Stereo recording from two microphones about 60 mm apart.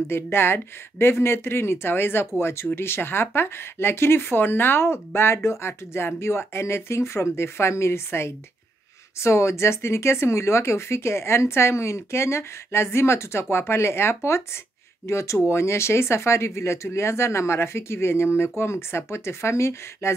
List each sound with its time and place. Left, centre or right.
0.1 s speech: left